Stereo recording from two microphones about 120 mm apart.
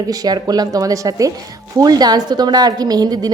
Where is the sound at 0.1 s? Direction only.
35° right (ahead or behind).